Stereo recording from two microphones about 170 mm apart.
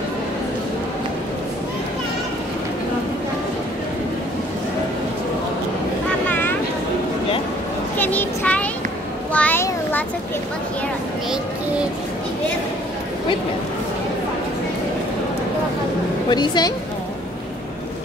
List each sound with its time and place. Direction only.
8.0 s children playing: 10° left (ahead or behind)
9.3 s child singing: 10° left (ahead or behind)
16.3 s a sound: 25° left (ahead or behind)